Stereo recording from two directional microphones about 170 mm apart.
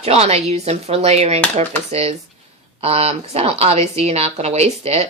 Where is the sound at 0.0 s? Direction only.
35° right (ahead or behind).